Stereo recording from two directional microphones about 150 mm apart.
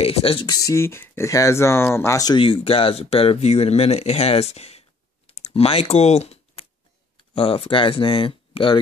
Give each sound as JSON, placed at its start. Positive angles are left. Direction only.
{"t": 0.0, "sound": "speech", "side_deg": 40}
{"t": 0.5, "sound": "speech", "side_deg": 20}